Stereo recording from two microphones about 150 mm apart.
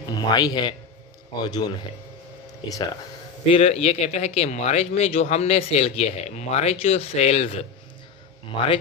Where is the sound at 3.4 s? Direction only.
45° left (ahead or behind).